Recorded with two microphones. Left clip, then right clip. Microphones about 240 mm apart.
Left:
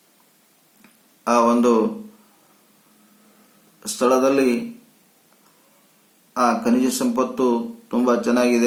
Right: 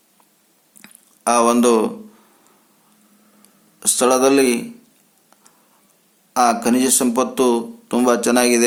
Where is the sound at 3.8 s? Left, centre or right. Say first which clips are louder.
Right 3 dB; right.